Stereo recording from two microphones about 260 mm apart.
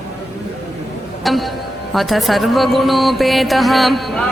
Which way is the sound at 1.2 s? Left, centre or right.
Centre.